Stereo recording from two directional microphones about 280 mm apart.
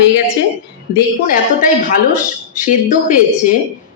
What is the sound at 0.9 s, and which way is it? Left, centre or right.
Speech, left.